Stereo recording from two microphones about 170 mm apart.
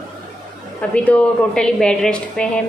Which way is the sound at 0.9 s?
5° left (ahead or behind).